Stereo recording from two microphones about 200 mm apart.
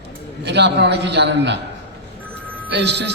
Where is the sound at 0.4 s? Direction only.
60° right (ahead or behind).